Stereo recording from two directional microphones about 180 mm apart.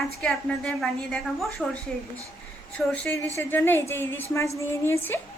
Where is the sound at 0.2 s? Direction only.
5° left (ahead or behind).